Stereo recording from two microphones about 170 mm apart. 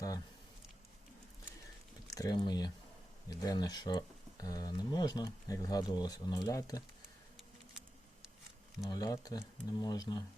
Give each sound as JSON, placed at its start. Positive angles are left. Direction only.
{"t": 2.0, "sound": "speech", "side_deg": 20}
{"t": 8.9, "sound": "speech", "side_deg": 20}